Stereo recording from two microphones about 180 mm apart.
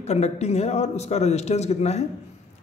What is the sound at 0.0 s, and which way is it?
A man's voice, 35° left (ahead or behind).